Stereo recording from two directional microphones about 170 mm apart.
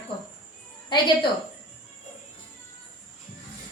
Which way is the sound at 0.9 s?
30° left (ahead or behind).